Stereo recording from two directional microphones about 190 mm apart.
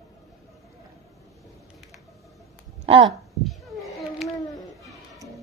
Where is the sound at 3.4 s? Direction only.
Centre (ahead or behind).